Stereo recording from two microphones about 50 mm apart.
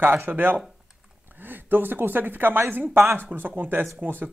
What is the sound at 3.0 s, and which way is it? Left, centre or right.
Speech, right.